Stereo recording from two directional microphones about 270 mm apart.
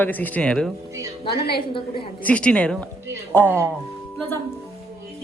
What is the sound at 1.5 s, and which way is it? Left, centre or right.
Speech, centre.